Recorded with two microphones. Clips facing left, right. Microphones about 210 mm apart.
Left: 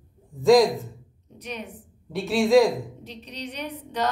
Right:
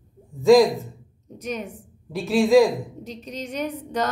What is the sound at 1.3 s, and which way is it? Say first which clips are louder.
Speech: right 5 dB; 45° right (ahead or behind).